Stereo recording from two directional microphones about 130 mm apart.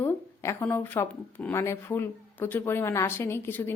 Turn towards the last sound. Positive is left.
turn(degrees=15)  # may be behind; listen again after turning